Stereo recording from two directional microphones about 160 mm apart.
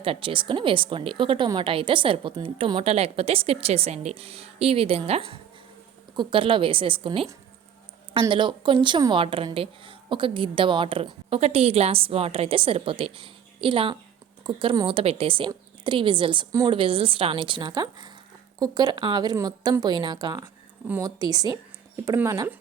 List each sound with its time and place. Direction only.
0.0 s a woman's voice: 35° right (ahead or behind)
20.8 s speech: 10° right (ahead or behind)
21.2 s a woman's voice: 25° right (ahead or behind)